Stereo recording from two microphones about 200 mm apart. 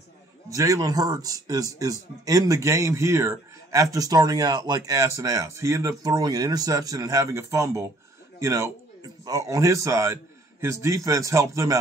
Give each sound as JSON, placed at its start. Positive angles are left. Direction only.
{"t": 0.5, "sound": "a man's voice", "side_deg": -15}